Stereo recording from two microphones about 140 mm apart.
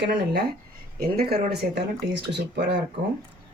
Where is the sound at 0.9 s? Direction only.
90° right.